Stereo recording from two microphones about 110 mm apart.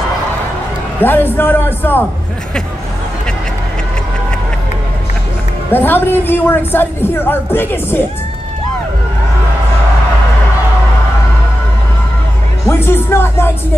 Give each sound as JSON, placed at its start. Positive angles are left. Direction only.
{"t": 1.0, "sound": "a man's voice", "side_deg": 20}
{"t": 5.7, "sound": "speech", "side_deg": 20}
{"t": 12.6, "sound": "speech", "side_deg": 20}